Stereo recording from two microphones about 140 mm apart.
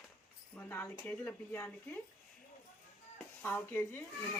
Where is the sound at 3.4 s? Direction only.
15° left (ahead or behind).